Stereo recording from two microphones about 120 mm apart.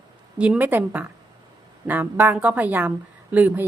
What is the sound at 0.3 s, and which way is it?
A woman's voice, 10° right (ahead or behind).